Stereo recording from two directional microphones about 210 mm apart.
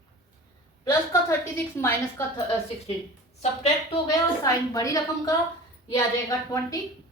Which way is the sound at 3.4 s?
30° left (ahead or behind).